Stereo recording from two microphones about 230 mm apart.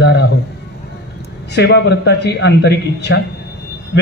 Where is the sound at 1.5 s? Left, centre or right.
Left.